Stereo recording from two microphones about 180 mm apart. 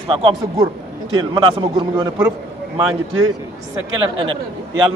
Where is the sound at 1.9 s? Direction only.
20° right (ahead or behind).